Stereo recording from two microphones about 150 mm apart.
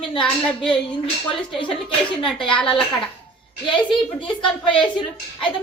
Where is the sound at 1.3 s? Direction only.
35° left (ahead or behind).